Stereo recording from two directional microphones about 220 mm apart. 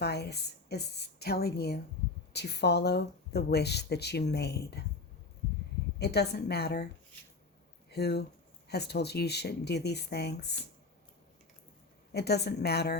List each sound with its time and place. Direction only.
0.0 s speech: 45° left (ahead or behind)
6.0 s speech: 50° left (ahead or behind)
12.1 s speech: 50° left (ahead or behind)